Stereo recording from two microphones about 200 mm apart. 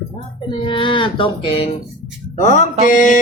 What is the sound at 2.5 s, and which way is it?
Speech, 40° left (ahead or behind).